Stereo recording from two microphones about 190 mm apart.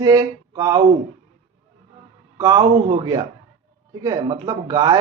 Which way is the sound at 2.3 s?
20° right (ahead or behind).